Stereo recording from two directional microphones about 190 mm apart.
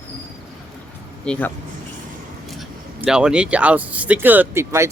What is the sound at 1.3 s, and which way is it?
Speech, 10° left (ahead or behind).